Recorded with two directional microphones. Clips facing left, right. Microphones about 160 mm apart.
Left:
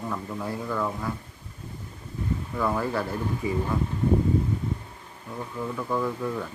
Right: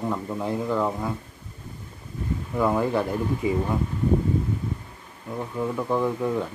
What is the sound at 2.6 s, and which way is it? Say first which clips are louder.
Speech: right 5 dB; 15° right (ahead or behind).